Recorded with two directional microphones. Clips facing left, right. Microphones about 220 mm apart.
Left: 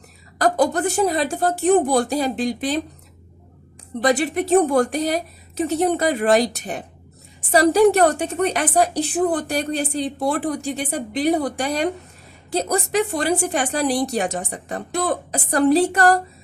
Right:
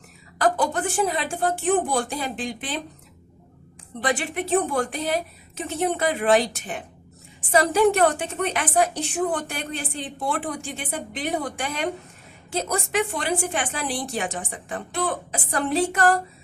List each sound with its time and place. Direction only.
0.3 s a woman's voice: 40° left (ahead or behind)
4.0 s a woman's voice: 40° left (ahead or behind)